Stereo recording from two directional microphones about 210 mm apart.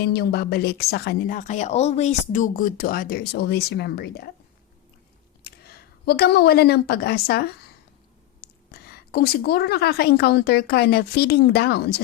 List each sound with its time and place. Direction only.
0.0 s speech: 50° left (ahead or behind)
5.4 s a woman's voice: 50° left (ahead or behind)